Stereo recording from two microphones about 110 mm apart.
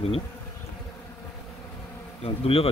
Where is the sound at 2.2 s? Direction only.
60° left (ahead or behind).